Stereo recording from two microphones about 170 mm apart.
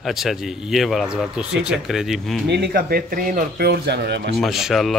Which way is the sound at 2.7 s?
55° right (ahead or behind).